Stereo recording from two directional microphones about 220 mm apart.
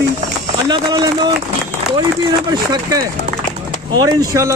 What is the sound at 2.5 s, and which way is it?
Speech, 15° right (ahead or behind).